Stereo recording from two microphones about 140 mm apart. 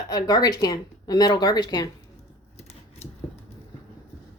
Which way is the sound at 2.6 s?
50° left (ahead or behind).